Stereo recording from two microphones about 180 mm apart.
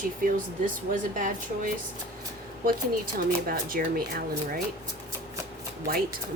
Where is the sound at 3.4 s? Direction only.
55° right (ahead or behind).